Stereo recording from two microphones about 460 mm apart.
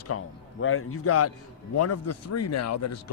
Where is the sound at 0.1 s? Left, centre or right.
Left.